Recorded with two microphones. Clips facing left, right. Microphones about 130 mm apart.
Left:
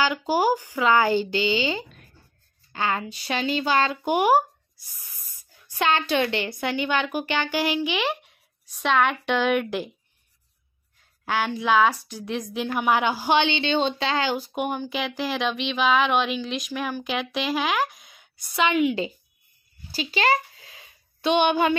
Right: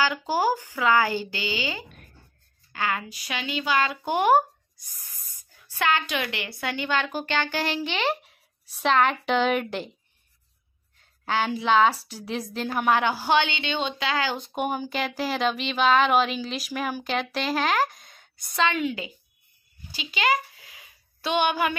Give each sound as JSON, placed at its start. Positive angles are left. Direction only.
{"t": 0.0, "sound": "speech", "side_deg": 15}
{"t": 4.0, "sound": "speech", "side_deg": 15}
{"t": 5.7, "sound": "speech", "side_deg": 25}
{"t": 6.5, "sound": "speech", "side_deg": 20}
{"t": 11.2, "sound": "speech", "side_deg": 5}
{"t": 12.9, "sound": "speech", "side_deg": 15}
{"t": 14.3, "sound": "speech", "side_deg": 5}
{"t": 18.6, "sound": "a woman's voice", "side_deg": 15}
{"t": 19.9, "sound": "a sound", "side_deg": 35}